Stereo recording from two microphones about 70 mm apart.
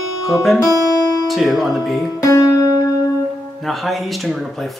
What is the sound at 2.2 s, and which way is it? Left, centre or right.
Music, left.